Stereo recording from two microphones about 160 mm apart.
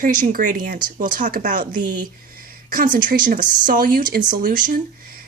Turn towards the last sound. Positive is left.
turn(degrees=-60)  # may be behind; listen again after turning